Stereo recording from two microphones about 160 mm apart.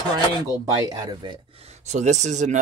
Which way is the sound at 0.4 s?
25° right (ahead or behind).